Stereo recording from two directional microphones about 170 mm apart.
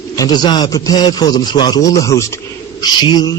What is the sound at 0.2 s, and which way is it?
Speech, 25° left (ahead or behind).